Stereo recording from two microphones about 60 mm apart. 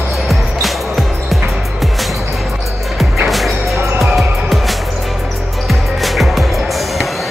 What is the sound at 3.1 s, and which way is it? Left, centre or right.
Music, centre.